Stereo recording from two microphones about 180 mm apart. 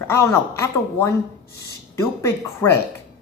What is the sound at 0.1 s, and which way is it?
Speech, 15° left (ahead or behind).